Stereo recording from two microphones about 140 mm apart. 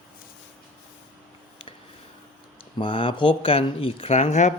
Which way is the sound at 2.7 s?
40° left (ahead or behind).